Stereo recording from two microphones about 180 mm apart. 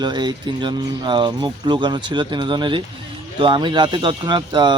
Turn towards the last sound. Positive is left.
turn(degrees=-25)  # may be behind; listen again after turning